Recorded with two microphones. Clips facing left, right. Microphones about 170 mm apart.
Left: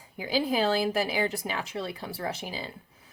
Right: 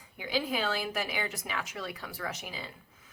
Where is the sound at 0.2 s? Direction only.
35° left (ahead or behind).